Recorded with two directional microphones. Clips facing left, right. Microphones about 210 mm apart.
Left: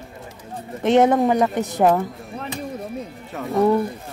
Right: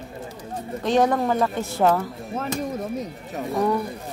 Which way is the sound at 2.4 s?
45° right (ahead or behind).